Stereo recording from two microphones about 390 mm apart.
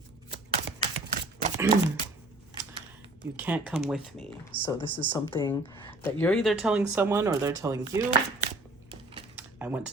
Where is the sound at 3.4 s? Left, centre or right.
Centre.